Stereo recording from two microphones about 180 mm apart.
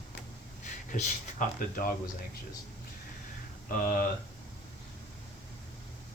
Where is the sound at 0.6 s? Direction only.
45° left (ahead or behind).